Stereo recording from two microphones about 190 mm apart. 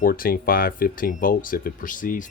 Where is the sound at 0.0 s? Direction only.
50° left (ahead or behind).